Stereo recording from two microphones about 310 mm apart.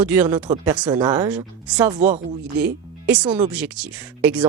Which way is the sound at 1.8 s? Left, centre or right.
Right.